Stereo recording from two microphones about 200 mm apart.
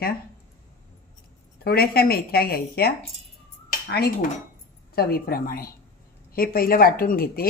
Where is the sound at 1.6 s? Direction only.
50° left (ahead or behind).